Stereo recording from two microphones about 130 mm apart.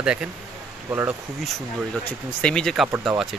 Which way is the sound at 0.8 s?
15° right (ahead or behind).